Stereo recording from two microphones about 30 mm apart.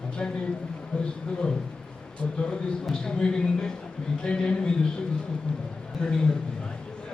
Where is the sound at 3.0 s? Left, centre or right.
Left.